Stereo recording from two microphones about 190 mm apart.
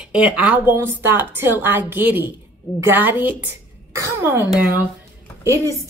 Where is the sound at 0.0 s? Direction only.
5° right (ahead or behind).